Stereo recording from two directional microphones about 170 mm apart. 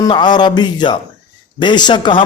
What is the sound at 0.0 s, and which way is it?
A man's voice, 25° left (ahead or behind).